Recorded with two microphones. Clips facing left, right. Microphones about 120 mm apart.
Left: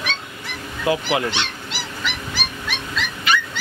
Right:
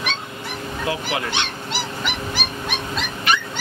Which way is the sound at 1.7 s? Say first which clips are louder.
Right 3 dB; 50° right (ahead or behind).